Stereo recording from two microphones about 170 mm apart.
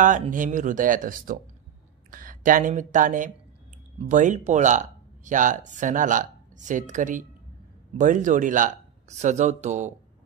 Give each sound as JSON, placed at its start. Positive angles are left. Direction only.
{"t": 0.0, "sound": "speech", "side_deg": -50}